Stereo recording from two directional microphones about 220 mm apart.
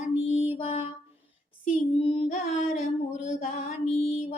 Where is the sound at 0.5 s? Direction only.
25° left (ahead or behind).